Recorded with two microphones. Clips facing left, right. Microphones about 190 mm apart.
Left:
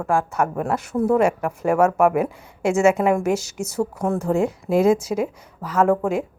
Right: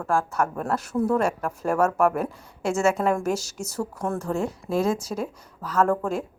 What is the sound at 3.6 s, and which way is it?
A woman's voice, 20° left (ahead or behind).